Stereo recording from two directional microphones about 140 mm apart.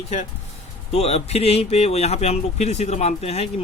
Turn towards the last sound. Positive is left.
turn(degrees=50)  # may be behind; listen again after turning